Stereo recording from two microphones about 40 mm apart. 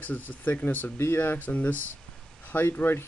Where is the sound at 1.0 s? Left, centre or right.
Left.